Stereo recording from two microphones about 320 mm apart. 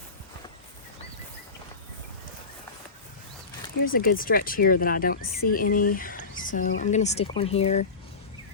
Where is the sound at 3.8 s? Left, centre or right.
Left.